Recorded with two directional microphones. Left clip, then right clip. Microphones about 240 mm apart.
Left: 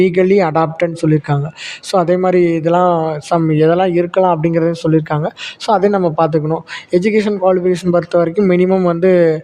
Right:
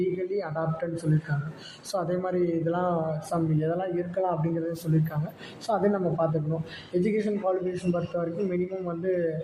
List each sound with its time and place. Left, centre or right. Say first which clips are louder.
0.0 s speech: left 17 dB; left